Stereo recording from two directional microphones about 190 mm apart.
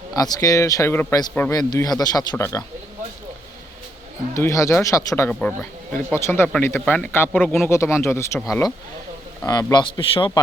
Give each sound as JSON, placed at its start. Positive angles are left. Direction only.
{"t": 0.2, "sound": "speech", "side_deg": 20}
{"t": 4.4, "sound": "speech", "side_deg": 15}
{"t": 5.3, "sound": "speech", "side_deg": 5}